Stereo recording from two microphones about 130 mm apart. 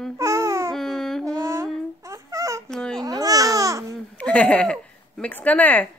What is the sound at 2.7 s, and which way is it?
Baby cry, 5° left (ahead or behind).